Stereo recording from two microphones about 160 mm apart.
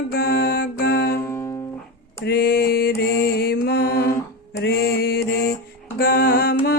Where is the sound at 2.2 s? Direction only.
70° left (ahead or behind).